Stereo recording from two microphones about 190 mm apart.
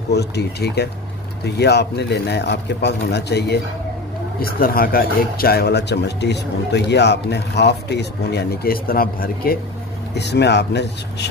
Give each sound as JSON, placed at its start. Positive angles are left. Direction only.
{"t": 0.1, "sound": "speech", "side_deg": 60}
{"t": 4.4, "sound": "speech", "side_deg": 50}
{"t": 10.1, "sound": "speech", "side_deg": 60}